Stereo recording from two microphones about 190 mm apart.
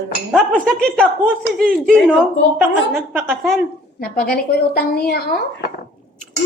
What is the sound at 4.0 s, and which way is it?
A woman's voice, 55° left (ahead or behind).